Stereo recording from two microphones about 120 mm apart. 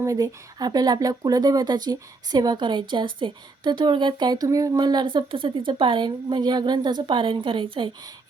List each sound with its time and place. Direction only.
0.0 s speech: 30° right (ahead or behind); by 7.9 s 45° right (ahead or behind)